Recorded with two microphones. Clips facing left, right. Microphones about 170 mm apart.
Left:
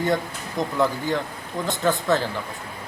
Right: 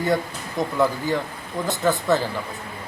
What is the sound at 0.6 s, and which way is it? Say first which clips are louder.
Speech: right 1 dB; 5° right (ahead or behind).